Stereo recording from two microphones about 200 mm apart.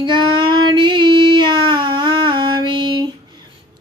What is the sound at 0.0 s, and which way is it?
Child singing, 25° right (ahead or behind).